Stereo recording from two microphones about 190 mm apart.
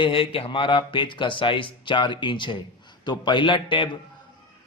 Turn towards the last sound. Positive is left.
turn(degrees=25)  # may be behind; listen again after turning